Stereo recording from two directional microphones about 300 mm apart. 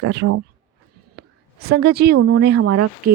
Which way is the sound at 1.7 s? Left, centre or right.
Right.